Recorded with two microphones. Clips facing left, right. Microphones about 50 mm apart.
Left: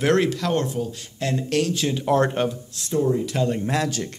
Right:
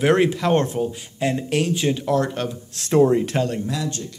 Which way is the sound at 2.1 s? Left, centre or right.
Left.